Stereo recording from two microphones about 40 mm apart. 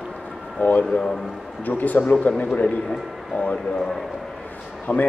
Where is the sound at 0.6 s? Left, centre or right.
Left.